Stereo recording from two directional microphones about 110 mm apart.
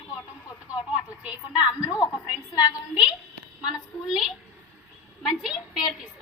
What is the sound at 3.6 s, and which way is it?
A woman's voice, 5° right (ahead or behind).